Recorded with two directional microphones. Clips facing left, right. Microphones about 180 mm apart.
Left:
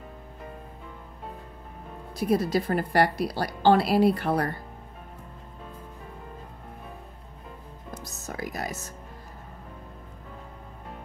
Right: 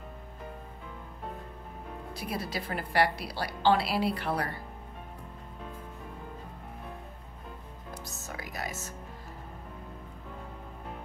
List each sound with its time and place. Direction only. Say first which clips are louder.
2.1 s a woman's voice: left 12 dB; 45° left (ahead or behind)
8.0 s music: left 8 dB; 40° left (ahead or behind)